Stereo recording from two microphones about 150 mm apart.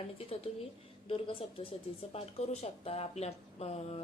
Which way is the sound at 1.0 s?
40° left (ahead or behind).